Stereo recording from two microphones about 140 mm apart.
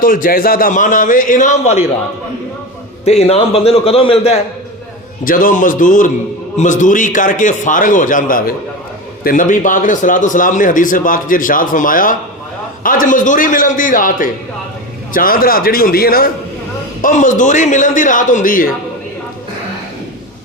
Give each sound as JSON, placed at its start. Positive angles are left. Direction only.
{"t": 0.0, "sound": "a man's voice", "side_deg": 85}
{"t": 3.0, "sound": "a man's voice", "side_deg": 50}
{"t": 5.2, "sound": "a man's voice", "side_deg": 80}
{"t": 9.2, "sound": "a man's voice", "side_deg": 70}
{"t": 15.1, "sound": "a man's voice", "side_deg": 90}
{"t": 17.0, "sound": "a man's voice", "side_deg": 65}